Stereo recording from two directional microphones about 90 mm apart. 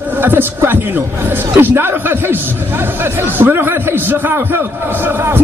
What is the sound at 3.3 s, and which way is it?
A man's voice, 20° right (ahead or behind).